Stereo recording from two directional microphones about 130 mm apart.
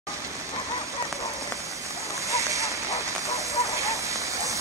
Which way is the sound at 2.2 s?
25° right (ahead or behind).